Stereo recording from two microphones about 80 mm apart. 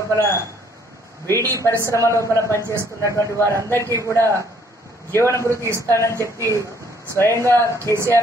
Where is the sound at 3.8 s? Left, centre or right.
Right.